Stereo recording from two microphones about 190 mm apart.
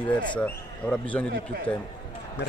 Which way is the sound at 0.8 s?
5° left (ahead or behind).